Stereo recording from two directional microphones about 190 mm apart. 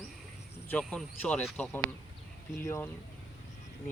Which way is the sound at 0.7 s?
Centre (ahead or behind).